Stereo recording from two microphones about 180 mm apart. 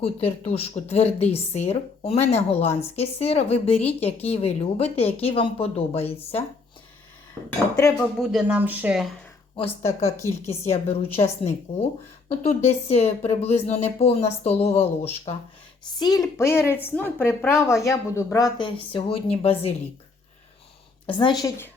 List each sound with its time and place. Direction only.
0.0 s a woman's voice: 30° left (ahead or behind)
8.2 s speech: 5° right (ahead or behind)
10.0 s a woman's voice: 15° left (ahead or behind)
10.4 s a woman's voice: 35° left (ahead or behind)
16.0 s a woman's voice: 20° left (ahead or behind)
21.1 s a woman's voice: 25° left (ahead or behind)